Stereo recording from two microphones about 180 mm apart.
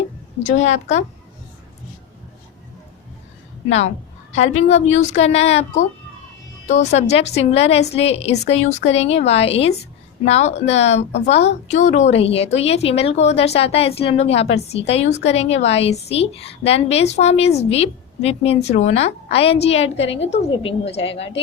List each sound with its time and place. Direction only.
0.4 s a woman's voice: 40° left (ahead or behind)
3.7 s a woman's voice: 40° left (ahead or behind)